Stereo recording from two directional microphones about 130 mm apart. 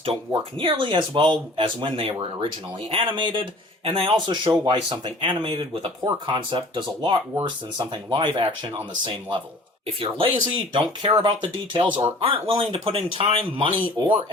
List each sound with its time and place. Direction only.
0.3 s speech: 40° right (ahead or behind)